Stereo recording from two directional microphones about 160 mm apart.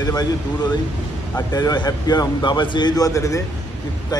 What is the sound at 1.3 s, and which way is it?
A man's voice, 25° left (ahead or behind).